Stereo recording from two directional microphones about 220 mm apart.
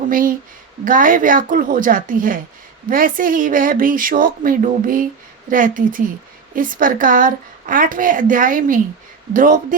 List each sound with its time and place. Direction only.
0.1 s a woman's voice: 40° right (ahead or behind)